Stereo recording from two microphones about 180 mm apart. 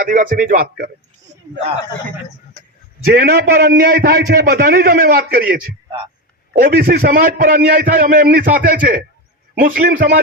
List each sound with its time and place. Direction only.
0.0 s a man's voice: 45° right (ahead or behind)
3.0 s a man's voice: 55° right (ahead or behind)